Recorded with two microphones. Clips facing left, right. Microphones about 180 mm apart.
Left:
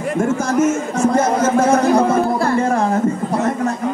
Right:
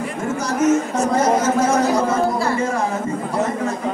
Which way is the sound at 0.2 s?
50° left (ahead or behind).